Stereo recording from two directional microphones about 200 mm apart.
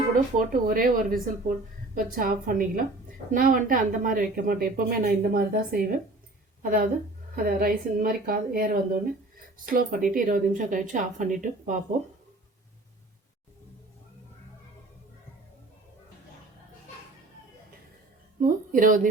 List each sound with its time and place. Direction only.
0.3 s a woman's voice: 45° right (ahead or behind)
18.3 s a woman's voice: 40° right (ahead or behind)